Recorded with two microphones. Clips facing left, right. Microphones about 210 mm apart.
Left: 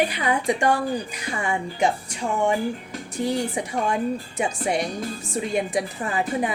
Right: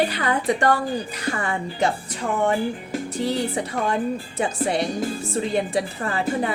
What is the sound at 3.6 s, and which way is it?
A woman's voice, 10° left (ahead or behind).